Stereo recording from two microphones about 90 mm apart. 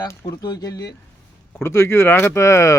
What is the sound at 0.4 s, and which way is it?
Speech, 50° left (ahead or behind).